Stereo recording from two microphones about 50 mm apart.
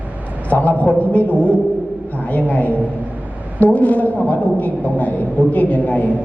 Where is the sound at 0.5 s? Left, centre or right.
Left.